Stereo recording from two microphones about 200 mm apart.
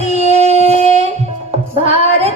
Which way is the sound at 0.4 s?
30° right (ahead or behind).